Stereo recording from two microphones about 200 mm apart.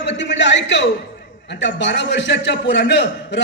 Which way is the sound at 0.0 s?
60° left (ahead or behind).